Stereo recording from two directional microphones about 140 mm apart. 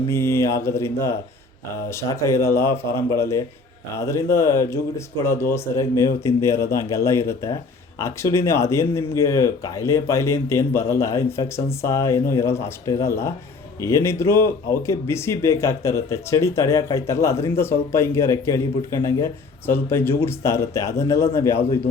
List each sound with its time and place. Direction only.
0.1 s speech: 20° left (ahead or behind)